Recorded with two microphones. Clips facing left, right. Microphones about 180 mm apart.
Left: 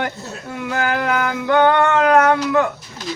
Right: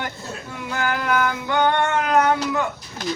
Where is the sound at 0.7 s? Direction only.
55° left (ahead or behind).